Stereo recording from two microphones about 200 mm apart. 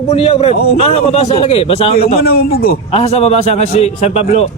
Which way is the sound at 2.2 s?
50° left (ahead or behind).